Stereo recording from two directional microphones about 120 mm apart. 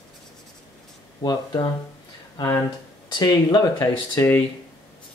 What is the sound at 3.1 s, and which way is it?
Speech, 35° left (ahead or behind).